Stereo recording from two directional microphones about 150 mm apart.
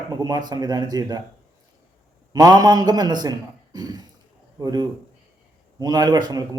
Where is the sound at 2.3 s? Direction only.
25° right (ahead or behind).